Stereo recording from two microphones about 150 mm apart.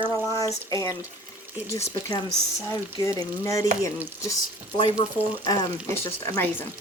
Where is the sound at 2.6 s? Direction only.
20° left (ahead or behind).